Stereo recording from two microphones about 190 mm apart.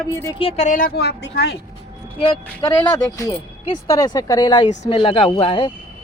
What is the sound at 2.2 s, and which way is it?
Speech, 25° left (ahead or behind).